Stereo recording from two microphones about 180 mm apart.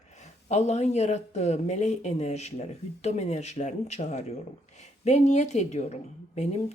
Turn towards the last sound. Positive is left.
turn(degrees=40)  # may be behind; listen again after turning